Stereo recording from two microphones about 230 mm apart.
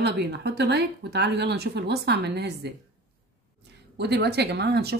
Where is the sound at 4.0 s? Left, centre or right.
Right.